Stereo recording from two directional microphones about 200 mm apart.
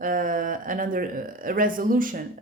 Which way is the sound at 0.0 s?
40° right (ahead or behind).